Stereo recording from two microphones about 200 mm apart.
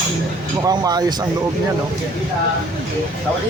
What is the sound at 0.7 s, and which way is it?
Speech, 20° right (ahead or behind).